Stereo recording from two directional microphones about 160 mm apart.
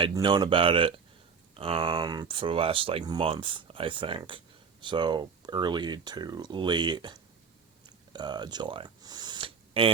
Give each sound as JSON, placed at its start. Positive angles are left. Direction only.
{"t": 0.0, "sound": "speech", "side_deg": -30}
{"t": 7.9, "sound": "camera", "side_deg": -25}